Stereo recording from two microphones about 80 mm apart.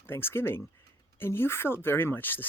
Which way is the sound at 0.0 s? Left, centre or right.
Left.